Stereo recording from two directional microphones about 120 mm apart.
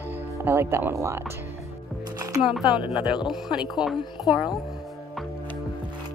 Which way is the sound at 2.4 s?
5° right (ahead or behind).